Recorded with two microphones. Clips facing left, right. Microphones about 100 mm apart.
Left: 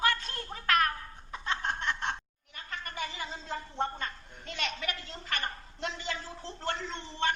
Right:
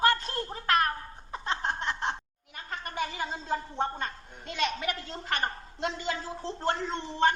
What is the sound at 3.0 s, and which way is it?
Cat, 50° right (ahead or behind).